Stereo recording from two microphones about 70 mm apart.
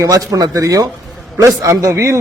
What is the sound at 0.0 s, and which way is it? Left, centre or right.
Speech, right.